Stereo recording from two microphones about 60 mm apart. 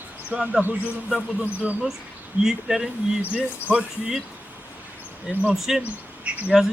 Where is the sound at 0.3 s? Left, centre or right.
Centre.